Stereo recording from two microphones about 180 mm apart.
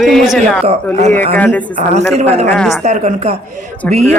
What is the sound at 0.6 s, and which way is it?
Speech, 40° right (ahead or behind).